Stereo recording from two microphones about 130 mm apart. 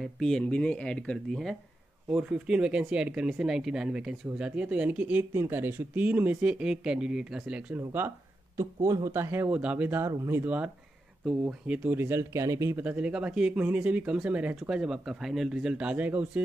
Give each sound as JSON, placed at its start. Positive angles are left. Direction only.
{"t": 0.0, "sound": "speech", "side_deg": 5}
{"t": 8.5, "sound": "speech", "side_deg": -25}